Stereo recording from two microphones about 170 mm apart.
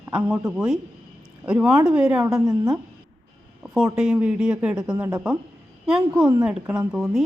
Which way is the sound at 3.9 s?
5° right (ahead or behind).